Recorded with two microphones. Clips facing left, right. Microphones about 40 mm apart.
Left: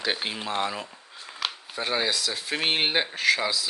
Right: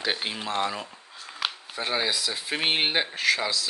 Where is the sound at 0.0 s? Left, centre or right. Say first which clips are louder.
Even; centre.